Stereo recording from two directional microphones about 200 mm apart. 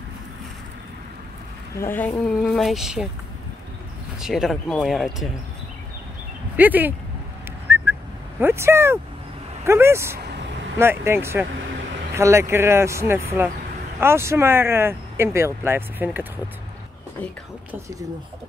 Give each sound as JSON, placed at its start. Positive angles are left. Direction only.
{"t": 1.8, "sound": "speech", "side_deg": 10}
{"t": 4.2, "sound": "speech", "side_deg": 0}
{"t": 6.5, "sound": "speech", "side_deg": -10}
{"t": 7.7, "sound": "whistling", "side_deg": -10}
{"t": 8.4, "sound": "speech", "side_deg": -10}